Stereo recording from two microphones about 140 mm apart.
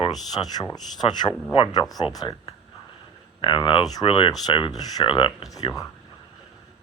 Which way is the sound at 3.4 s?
35° left (ahead or behind).